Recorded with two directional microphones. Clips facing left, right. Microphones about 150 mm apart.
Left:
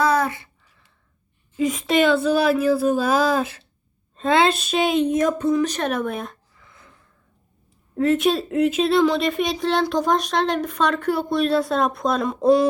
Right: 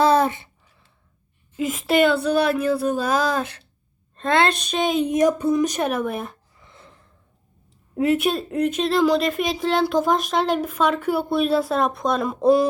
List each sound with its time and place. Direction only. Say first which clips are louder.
0.0 s a sound: right 3 dB; 25° right (ahead or behind)
1.5 s speech: even; centre (ahead or behind)
5.0 s speech: right 1 dB; 10° right (ahead or behind)
5.9 s speech: even; centre (ahead or behind)
6.6 s gasp: right 3 dB; 25° right (ahead or behind)
7.9 s speech: left 1 dB; 10° right (ahead or behind)